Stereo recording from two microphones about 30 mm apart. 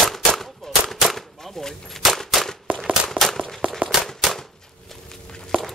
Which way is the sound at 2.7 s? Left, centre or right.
Right.